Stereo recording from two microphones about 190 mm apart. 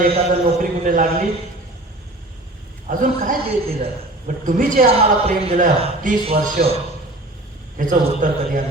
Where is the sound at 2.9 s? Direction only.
45° right (ahead or behind).